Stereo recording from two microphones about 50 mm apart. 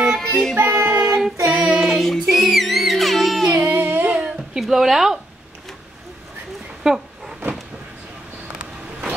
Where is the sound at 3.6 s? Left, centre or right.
Right.